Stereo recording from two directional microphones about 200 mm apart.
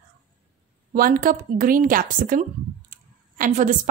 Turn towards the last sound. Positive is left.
turn(degrees=-40)  # may be behind; listen again after turning